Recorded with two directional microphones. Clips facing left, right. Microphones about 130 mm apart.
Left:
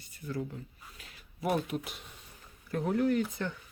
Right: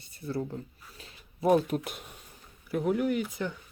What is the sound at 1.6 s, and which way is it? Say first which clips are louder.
Speech: right 4 dB; 45° right (ahead or behind).